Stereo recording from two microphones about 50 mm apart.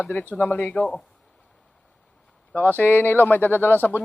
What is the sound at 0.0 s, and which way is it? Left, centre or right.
Speech, left.